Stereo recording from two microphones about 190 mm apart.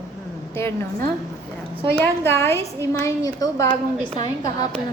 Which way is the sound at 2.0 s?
10° left (ahead or behind).